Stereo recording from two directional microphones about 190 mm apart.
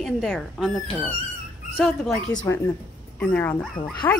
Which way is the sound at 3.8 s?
25° left (ahead or behind).